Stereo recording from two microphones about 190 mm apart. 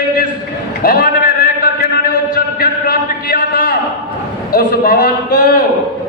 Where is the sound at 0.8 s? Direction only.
50° left (ahead or behind).